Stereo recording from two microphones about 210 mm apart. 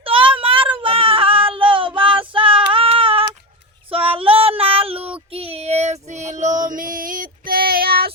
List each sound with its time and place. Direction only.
0.0 s a sound: 25° right (ahead or behind)
0.8 s child singing: 25° right (ahead or behind)
3.8 s female singing: 25° right (ahead or behind)
5.3 s child singing: 30° right (ahead or behind)
6.6 s female singing: 40° right (ahead or behind)